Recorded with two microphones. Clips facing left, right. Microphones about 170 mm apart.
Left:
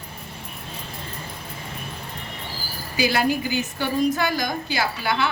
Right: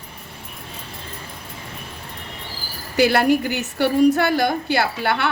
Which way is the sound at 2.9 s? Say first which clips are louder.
Right 6 dB; 65° right (ahead or behind).